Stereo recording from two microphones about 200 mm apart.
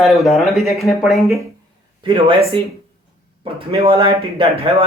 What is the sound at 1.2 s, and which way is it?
Speech, 15° right (ahead or behind).